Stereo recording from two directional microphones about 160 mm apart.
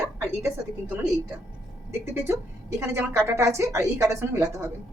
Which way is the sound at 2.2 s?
15° right (ahead or behind).